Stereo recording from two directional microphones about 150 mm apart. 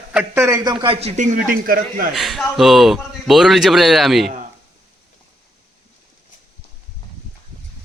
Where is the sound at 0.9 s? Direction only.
50° right (ahead or behind); by 2.1 s 75° right (ahead or behind).